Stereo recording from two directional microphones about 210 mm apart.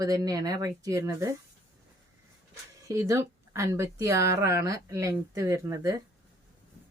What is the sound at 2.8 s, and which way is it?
Speech, 15° right (ahead or behind).